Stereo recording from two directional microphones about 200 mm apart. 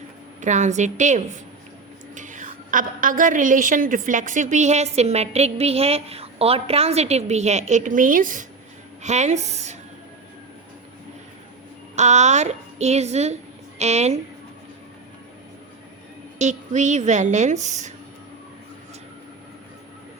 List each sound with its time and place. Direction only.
0.4 s a woman's voice: 35° right (ahead or behind)
11.9 s a woman's voice: 35° right (ahead or behind)
16.4 s a woman's voice: 35° right (ahead or behind)